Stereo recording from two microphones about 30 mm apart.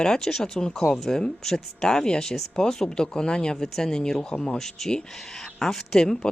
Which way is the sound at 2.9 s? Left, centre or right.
Left.